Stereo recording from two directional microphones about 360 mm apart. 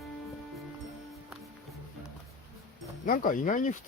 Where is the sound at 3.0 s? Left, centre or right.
Left.